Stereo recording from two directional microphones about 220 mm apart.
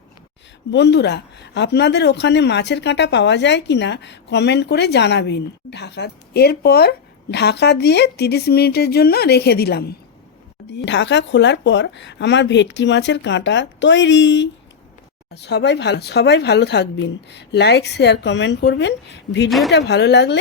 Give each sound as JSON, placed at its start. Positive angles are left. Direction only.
{"t": 0.7, "sound": "speech", "side_deg": 50}
{"t": 19.5, "sound": "speech", "side_deg": 0}
{"t": 19.7, "sound": "speech", "side_deg": 50}